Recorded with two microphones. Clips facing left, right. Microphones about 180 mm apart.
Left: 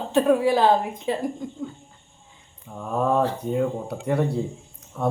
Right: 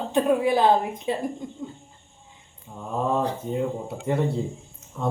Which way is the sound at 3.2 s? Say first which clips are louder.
Left 3 dB; 20° right (ahead or behind).